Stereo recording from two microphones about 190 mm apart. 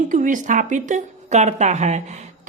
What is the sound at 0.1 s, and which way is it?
A woman's voice, 45° right (ahead or behind).